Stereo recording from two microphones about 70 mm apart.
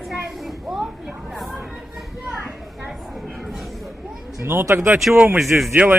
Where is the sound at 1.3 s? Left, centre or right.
Centre.